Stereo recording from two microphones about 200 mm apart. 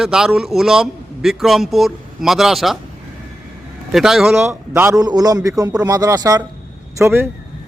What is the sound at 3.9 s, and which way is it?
A man's voice, centre (ahead or behind).